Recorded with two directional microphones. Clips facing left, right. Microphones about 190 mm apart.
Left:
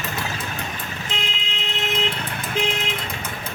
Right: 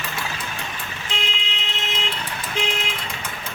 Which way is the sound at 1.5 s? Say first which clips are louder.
Left 9 dB; 55° left (ahead or behind).